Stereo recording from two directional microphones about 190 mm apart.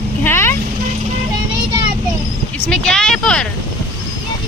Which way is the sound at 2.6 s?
5° left (ahead or behind).